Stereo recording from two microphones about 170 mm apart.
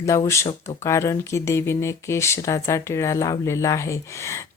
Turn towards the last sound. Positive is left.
turn(degrees=15)  # may be behind; listen again after turning